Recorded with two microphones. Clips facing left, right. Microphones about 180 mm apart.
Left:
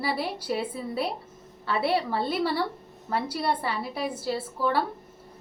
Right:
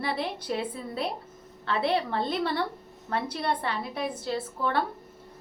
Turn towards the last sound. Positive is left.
turn(degrees=5)  # may be behind; listen again after turning